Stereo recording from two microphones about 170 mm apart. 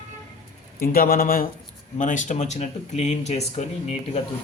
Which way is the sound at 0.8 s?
60° left (ahead or behind).